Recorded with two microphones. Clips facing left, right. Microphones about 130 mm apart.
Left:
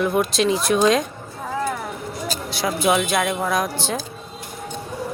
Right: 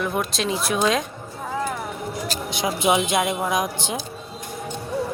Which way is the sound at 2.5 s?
20° right (ahead or behind).